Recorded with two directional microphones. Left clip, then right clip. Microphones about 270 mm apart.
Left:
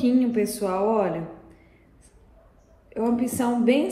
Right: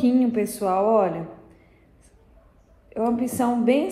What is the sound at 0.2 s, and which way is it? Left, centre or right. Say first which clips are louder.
A woman's voice: right 1 dB; right.